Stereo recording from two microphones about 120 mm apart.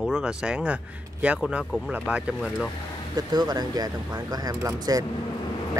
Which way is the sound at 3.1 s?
35° right (ahead or behind).